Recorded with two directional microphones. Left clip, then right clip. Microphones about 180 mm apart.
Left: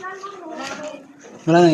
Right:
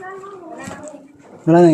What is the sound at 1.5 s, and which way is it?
Speech, 45° right (ahead or behind).